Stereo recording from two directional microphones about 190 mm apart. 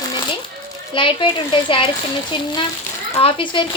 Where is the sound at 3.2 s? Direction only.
25° left (ahead or behind).